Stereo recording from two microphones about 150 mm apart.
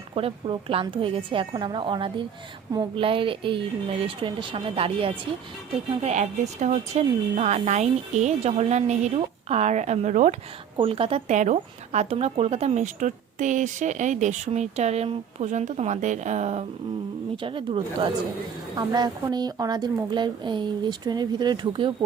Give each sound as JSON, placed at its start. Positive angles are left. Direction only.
{"t": 0.1, "sound": "a woman's voice", "side_deg": -40}
{"t": 10.8, "sound": "a woman's voice", "side_deg": -40}
{"t": 11.3, "sound": "speech", "side_deg": -50}
{"t": 17.3, "sound": "a woman's voice", "side_deg": -35}